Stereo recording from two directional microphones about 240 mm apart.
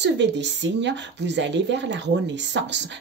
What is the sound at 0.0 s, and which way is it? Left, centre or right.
A woman's voice, right.